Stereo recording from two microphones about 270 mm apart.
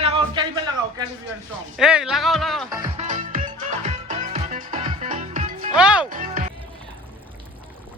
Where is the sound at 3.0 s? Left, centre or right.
Right.